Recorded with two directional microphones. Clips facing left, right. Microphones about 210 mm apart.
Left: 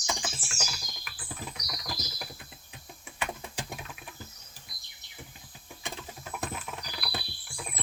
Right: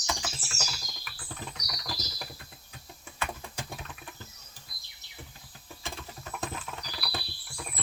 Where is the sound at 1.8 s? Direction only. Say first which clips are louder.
Even; 10° left (ahead or behind).